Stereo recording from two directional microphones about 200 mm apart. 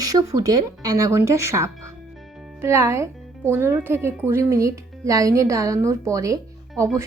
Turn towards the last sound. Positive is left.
turn(degrees=-15)  # may be behind; listen again after turning